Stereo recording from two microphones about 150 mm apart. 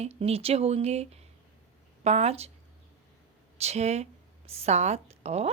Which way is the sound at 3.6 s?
45° right (ahead or behind).